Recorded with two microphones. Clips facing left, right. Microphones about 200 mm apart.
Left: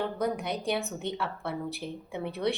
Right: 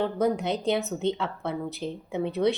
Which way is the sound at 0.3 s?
25° right (ahead or behind).